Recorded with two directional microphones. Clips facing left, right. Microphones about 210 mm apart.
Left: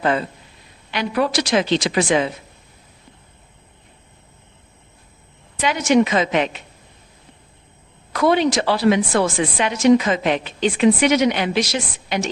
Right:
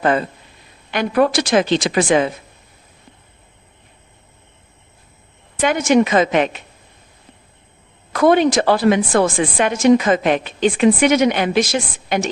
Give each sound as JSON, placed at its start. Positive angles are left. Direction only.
{"t": 0.0, "sound": "a woman's voice", "side_deg": -50}
{"t": 5.5, "sound": "a woman's voice", "side_deg": -50}
{"t": 8.1, "sound": "a woman's voice", "side_deg": -50}